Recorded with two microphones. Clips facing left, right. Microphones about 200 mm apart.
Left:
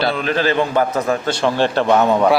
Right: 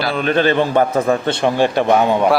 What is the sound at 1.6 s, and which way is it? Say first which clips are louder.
Speech: even; 15° right (ahead or behind).